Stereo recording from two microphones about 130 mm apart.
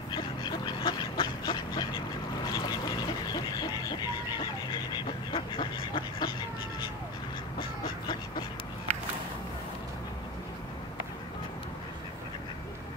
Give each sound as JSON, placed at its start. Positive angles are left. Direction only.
{"t": 0.1, "sound": "duck", "side_deg": 35}
{"t": 2.5, "sound": "quack", "side_deg": 30}
{"t": 4.9, "sound": "a sound", "side_deg": 40}